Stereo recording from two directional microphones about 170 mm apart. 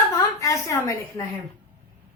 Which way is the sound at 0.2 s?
20° left (ahead or behind).